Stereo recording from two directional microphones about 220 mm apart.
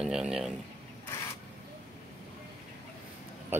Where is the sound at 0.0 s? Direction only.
5° right (ahead or behind).